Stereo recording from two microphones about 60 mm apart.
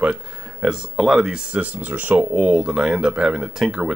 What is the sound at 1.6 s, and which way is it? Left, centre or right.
Speech, right.